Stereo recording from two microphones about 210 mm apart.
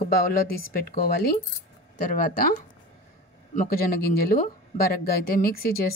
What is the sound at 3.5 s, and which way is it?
Speech, 40° left (ahead or behind).